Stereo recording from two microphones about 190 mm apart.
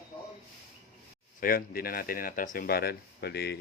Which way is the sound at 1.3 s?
50° left (ahead or behind).